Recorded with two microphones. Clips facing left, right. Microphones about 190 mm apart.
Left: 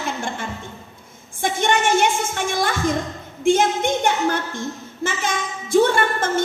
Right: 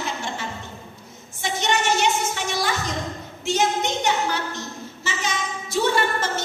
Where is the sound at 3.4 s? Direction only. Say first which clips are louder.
Left 5 dB; 50° left (ahead or behind).